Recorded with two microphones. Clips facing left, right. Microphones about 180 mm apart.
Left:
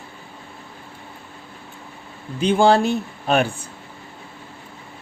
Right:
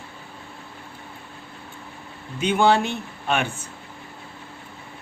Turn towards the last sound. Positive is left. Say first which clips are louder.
# left 5 dB
turn(degrees=40)  # may be behind; listen again after turning